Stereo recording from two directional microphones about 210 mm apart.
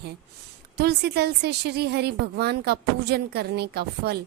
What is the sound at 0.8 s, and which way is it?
A woman's voice, 50° right (ahead or behind).